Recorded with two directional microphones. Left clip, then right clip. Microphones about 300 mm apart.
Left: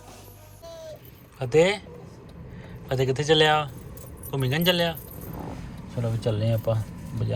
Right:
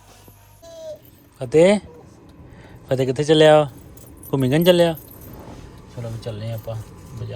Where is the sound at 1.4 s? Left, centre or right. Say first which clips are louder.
Right 6 dB; centre.